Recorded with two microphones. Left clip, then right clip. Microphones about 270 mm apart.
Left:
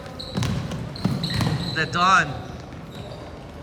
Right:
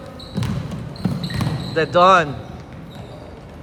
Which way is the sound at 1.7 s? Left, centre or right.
Centre.